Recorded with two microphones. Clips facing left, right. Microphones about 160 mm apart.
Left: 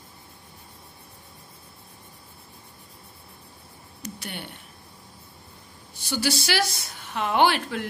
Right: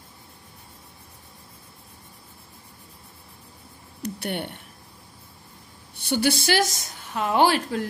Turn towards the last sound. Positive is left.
turn(degrees=-40)  # may be behind; listen again after turning